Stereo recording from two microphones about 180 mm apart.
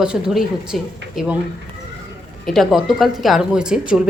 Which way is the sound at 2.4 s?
Centre (ahead or behind).